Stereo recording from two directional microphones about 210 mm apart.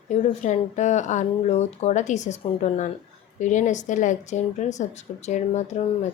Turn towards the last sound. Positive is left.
turn(degrees=35)  # may be behind; listen again after turning